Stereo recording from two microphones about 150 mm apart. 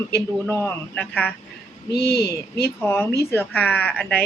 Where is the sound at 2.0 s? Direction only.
90° left.